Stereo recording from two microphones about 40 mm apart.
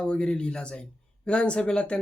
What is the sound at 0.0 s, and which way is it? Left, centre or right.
A man's voice, left.